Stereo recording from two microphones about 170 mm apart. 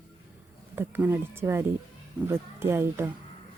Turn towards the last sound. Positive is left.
turn(degrees=-15)  # may be behind; listen again after turning